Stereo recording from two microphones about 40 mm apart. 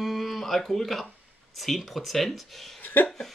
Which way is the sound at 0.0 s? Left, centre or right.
Centre.